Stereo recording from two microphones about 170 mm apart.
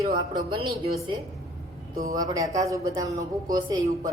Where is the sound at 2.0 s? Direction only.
20° right (ahead or behind).